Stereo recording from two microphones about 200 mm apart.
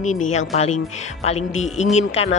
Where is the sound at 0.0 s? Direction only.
35° left (ahead or behind).